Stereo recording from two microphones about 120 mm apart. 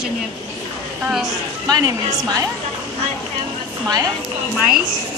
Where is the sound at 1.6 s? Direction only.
30° right (ahead or behind).